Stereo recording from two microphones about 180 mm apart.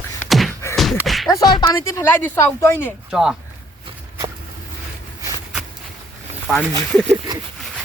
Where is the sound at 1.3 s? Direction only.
20° left (ahead or behind).